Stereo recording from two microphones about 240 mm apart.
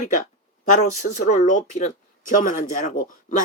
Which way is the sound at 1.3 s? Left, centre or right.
Left.